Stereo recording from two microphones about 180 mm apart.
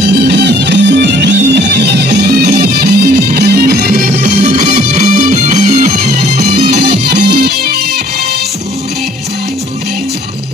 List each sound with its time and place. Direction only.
0.0 s music: 65° right (ahead or behind)
4.5 s music: 40° right (ahead or behind); by 7.8 s 60° right (ahead or behind)